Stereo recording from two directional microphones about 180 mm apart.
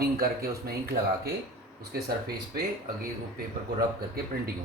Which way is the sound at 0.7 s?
60° right (ahead or behind).